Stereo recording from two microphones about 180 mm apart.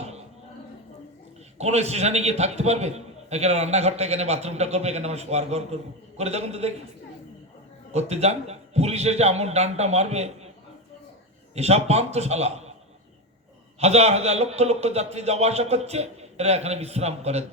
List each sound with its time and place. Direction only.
1.5 s a man's voice: 35° right (ahead or behind)
7.9 s a man's voice: 35° right (ahead or behind)
11.5 s a man's voice: 35° right (ahead or behind)
13.7 s a man's voice: 35° right (ahead or behind)